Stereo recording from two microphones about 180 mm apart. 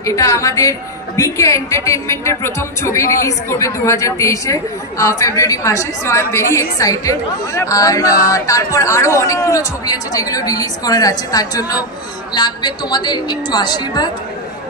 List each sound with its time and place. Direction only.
0.0 s a woman's voice: 15° left (ahead or behind)